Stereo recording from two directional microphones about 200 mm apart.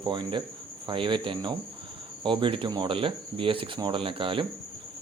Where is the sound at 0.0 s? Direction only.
25° right (ahead or behind).